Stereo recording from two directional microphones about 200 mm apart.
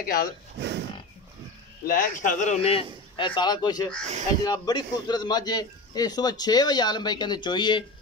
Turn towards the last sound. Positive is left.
turn(degrees=25)  # may be behind; listen again after turning